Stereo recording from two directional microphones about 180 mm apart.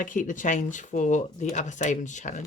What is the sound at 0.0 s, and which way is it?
Speech, 45° left (ahead or behind).